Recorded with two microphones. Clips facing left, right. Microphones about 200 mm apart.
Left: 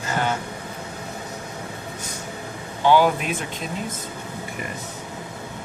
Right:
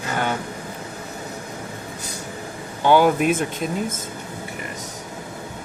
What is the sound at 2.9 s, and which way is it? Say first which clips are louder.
Speech: right 3 dB; 50° right (ahead or behind).